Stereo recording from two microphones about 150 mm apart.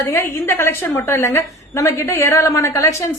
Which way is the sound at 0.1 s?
15° left (ahead or behind).